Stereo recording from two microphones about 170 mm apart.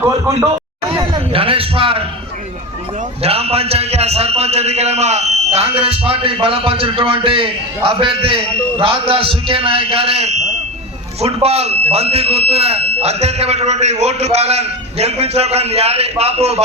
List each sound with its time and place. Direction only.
0.0 s a man's voice: 15° right (ahead or behind)
0.9 s speech: 35° right (ahead or behind)
3.2 s speech: 35° right (ahead or behind)